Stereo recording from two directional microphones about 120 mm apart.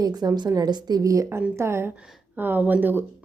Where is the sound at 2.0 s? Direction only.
5° right (ahead or behind).